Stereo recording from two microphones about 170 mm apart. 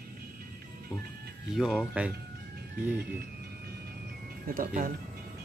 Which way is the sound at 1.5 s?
Centre (ahead or behind).